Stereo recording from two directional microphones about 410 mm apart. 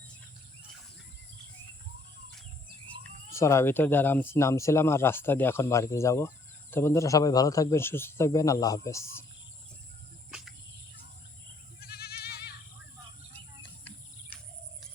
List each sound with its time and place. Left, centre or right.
3.3 s speech: centre
11.8 s goat: left